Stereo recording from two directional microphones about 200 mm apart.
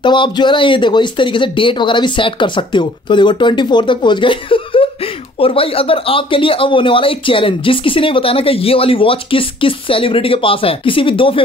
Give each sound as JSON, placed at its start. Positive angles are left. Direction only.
{"t": 0.0, "sound": "speech", "side_deg": 25}